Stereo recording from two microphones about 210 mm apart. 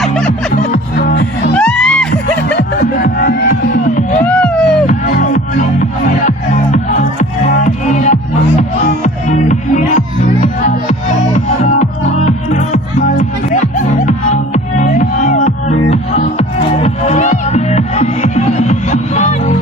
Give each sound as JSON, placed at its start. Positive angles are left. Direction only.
{"t": 0.5, "sound": "music", "side_deg": 45}
{"t": 1.5, "sound": "music", "side_deg": 5}
{"t": 2.6, "sound": "music", "side_deg": 45}
{"t": 4.3, "sound": "a sound", "side_deg": 5}
{"t": 4.9, "sound": "music", "side_deg": 40}
{"t": 9.5, "sound": "music", "side_deg": 35}
{"t": 11.3, "sound": "music", "side_deg": 35}